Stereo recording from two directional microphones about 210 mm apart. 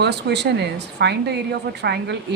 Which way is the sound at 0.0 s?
55° right (ahead or behind).